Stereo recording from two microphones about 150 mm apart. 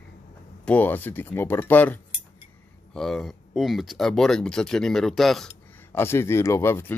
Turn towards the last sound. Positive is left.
turn(degrees=15)  # may be behind; listen again after turning